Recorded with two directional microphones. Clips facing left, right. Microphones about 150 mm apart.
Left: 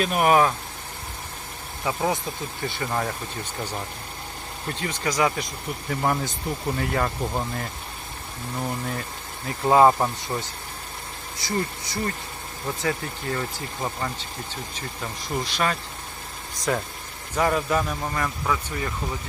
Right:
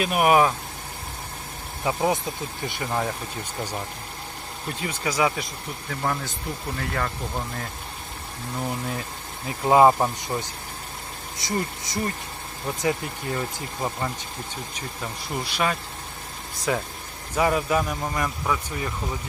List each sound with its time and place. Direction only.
0.0 s a man's voice: 10° right (ahead or behind)
1.8 s a man's voice: 20° right (ahead or behind)
5.9 s speech: 15° left (ahead or behind)
9.6 s a man's voice: 10° right (ahead or behind)